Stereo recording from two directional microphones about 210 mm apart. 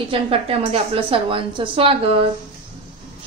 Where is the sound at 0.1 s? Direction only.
25° right (ahead or behind).